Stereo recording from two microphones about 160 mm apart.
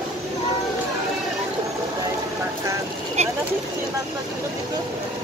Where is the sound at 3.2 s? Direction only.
40° right (ahead or behind).